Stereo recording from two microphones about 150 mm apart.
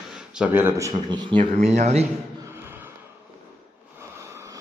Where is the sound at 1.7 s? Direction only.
50° right (ahead or behind).